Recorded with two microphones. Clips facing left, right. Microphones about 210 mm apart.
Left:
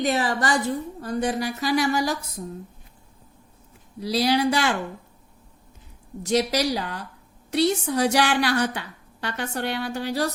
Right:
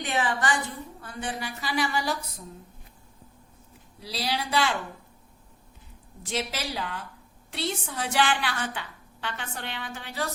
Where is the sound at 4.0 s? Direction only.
45° left (ahead or behind).